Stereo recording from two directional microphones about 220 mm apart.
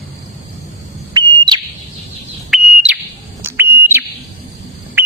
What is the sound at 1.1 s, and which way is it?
Smoke detector, 20° right (ahead or behind).